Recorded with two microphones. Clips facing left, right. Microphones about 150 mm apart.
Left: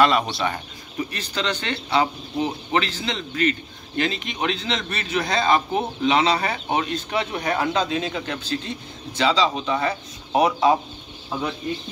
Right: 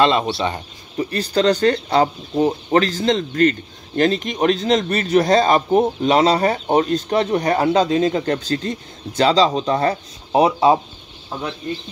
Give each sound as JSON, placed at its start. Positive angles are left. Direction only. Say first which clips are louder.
{"t": 0.0, "sound": "speech", "louder": "right 2 dB", "side_deg": -25}
{"t": 0.9, "sound": "speech", "louder": "right 9 dB", "side_deg": -40}
{"t": 10.3, "sound": "speech", "louder": "right 4 dB", "side_deg": -30}